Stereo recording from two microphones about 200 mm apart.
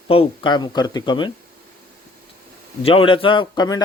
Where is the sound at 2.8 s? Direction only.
25° left (ahead or behind).